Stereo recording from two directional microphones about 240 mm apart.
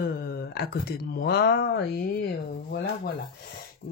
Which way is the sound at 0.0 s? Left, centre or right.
Left.